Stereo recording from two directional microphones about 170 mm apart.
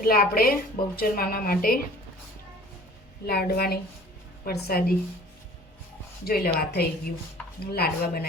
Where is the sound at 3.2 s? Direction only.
65° left (ahead or behind).